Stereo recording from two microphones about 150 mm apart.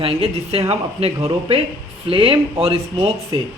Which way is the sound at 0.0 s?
40° right (ahead or behind).